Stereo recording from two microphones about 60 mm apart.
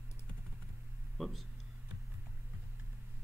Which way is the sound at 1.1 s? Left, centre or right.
Centre.